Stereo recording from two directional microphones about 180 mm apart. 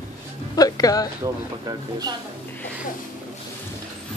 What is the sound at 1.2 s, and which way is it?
Speech, 20° right (ahead or behind).